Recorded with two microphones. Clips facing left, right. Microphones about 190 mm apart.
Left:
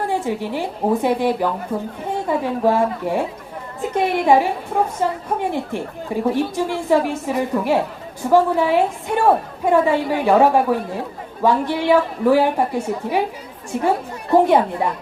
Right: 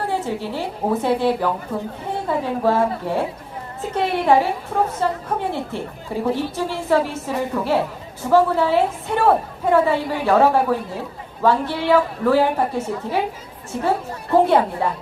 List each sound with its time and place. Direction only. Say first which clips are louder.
0.1 s a woman's voice: left 2 dB; 15° left (ahead or behind)